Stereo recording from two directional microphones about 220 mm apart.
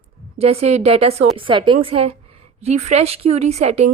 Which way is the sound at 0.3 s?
30° right (ahead or behind).